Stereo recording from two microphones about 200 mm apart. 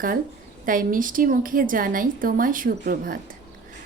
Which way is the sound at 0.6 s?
45° right (ahead or behind).